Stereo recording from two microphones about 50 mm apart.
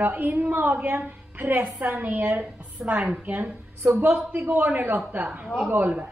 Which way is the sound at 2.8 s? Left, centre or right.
Centre.